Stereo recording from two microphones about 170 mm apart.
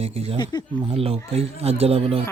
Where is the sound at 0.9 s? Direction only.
35° right (ahead or behind).